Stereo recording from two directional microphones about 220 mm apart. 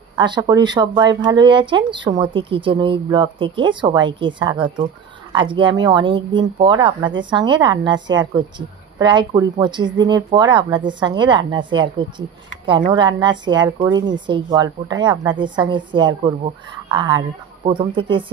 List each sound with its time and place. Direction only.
0.2 s speech: 20° right (ahead or behind)